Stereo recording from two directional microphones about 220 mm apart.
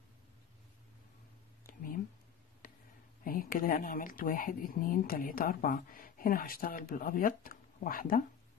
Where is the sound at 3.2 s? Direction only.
40° left (ahead or behind).